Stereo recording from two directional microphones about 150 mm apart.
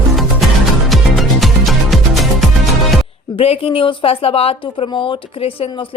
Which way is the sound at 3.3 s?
40° left (ahead or behind).